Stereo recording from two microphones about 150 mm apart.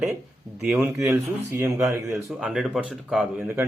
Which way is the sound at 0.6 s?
5° right (ahead or behind).